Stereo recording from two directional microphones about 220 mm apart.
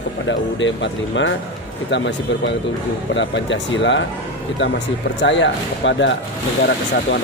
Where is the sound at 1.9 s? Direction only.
55° left (ahead or behind).